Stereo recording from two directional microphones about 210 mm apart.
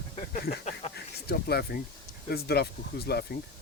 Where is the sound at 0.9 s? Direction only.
50° left (ahead or behind).